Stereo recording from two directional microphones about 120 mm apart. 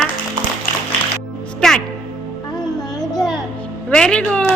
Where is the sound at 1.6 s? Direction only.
5° left (ahead or behind).